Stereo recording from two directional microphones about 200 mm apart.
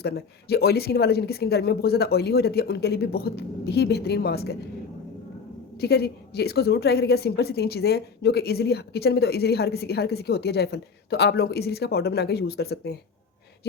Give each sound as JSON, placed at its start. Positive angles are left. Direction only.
{"t": 0.0, "sound": "a woman's voice", "side_deg": 50}
{"t": 5.7, "sound": "a woman's voice", "side_deg": 55}